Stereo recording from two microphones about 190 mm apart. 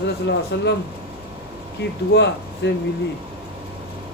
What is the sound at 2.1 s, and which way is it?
Speech, 65° left (ahead or behind).